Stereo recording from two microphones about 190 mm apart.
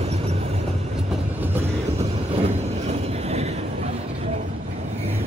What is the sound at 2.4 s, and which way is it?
Train, 35° right (ahead or behind).